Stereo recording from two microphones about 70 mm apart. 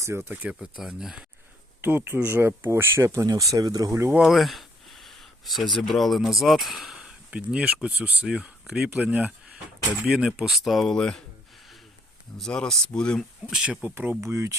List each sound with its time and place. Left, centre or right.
0.0 s speech: right
0.6 s speech: centre
1.8 s speech: right
3.1 s speech: right
4.2 s speech: centre
9.0 s speech: centre
10.4 s speech: centre
10.9 s speech: centre
12.4 s speech: centre
13.5 s speech: centre
13.8 s speech: right
14.2 s speech: right